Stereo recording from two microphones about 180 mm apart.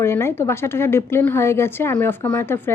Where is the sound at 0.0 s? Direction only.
15° left (ahead or behind).